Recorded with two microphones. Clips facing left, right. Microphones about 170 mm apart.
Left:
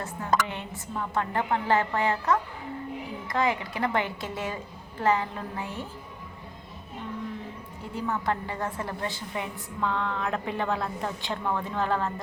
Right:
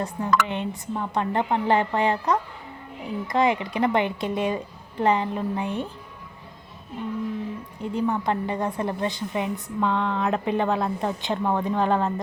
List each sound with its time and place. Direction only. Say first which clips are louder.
0.0 s a woman's voice: right 4 dB; 20° right (ahead or behind)
7.8 s a woman's voice: right 6 dB; 20° right (ahead or behind)